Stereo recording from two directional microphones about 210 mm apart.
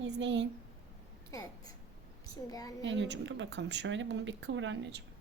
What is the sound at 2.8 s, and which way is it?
Speech, 60° right (ahead or behind).